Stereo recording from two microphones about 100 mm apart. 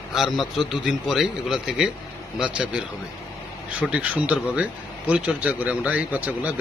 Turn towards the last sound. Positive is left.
turn(degrees=-15)  # may be behind; listen again after turning